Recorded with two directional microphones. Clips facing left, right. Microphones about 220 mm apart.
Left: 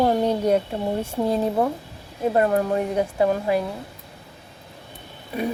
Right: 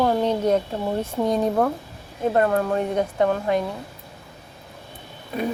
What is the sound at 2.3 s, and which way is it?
A woman's voice, 20° left (ahead or behind).